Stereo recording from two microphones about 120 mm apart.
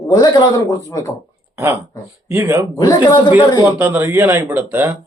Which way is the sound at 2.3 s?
20° right (ahead or behind).